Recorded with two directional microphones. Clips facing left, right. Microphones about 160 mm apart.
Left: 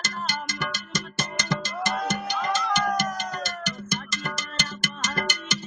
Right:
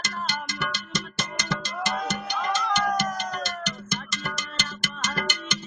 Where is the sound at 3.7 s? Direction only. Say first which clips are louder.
Left 1 dB; 45° left (ahead or behind).